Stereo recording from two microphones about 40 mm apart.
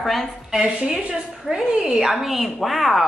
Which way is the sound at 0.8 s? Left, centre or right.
Right.